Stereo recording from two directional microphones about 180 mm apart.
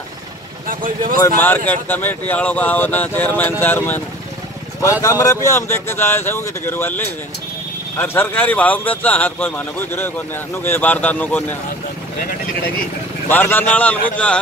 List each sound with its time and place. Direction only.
0.7 s speech: 50° right (ahead or behind)
1.2 s speech: 10° left (ahead or behind)
5.0 s speech: 20° left (ahead or behind)
13.3 s speech: 10° left (ahead or behind)